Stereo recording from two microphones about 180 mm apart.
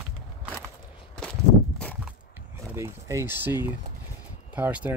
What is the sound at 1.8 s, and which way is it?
Walk, 5° left (ahead or behind).